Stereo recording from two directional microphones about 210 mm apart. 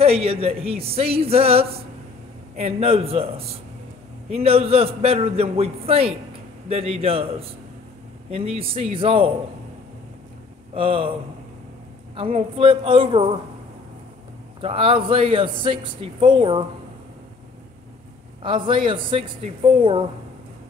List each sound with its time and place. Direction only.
0.0 s speech: 30° right (ahead or behind)
10.7 s speech: 25° right (ahead or behind)
12.2 s speech: 25° right (ahead or behind)
14.6 s speech: 25° right (ahead or behind)
18.4 s speech: 25° right (ahead or behind)